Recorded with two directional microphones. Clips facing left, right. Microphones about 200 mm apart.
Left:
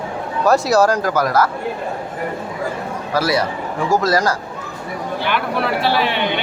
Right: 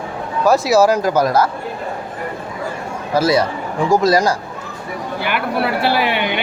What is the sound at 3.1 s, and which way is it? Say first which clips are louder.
Speech: right 4 dB; 20° right (ahead or behind).